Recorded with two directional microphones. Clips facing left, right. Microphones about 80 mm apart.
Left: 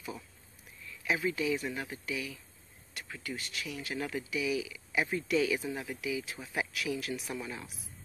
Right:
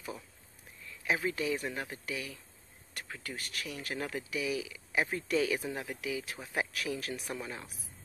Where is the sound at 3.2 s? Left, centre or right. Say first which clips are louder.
Left 2 dB; right.